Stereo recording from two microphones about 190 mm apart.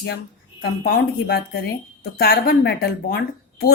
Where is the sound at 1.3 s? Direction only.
55° left (ahead or behind).